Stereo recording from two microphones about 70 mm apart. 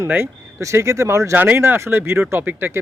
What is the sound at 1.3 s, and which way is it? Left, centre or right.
A man's voice, right.